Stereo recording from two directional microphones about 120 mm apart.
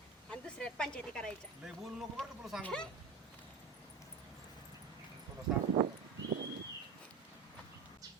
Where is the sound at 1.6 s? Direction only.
5° right (ahead or behind).